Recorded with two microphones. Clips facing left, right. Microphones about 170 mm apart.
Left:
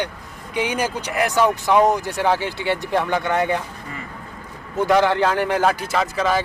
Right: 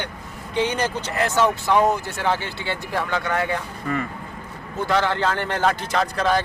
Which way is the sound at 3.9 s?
60° right (ahead or behind).